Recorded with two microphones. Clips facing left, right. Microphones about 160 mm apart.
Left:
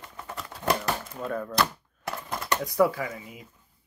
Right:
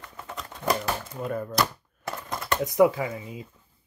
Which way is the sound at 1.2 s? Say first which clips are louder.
Right 1 dB; 10° right (ahead or behind).